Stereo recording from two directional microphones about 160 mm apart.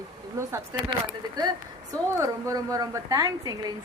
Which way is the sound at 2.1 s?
20° right (ahead or behind).